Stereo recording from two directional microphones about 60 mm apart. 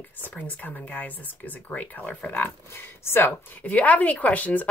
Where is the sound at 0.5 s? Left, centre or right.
Left.